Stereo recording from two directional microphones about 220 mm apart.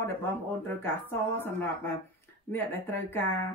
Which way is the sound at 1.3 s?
10° left (ahead or behind).